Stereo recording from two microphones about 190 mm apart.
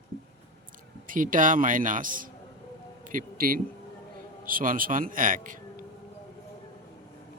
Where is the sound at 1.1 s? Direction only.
45° right (ahead or behind).